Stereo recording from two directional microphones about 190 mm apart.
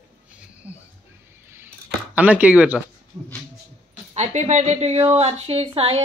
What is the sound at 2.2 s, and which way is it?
Speech, 5° right (ahead or behind).